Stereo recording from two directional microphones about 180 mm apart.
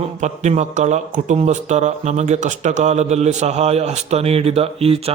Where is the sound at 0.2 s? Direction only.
40° right (ahead or behind).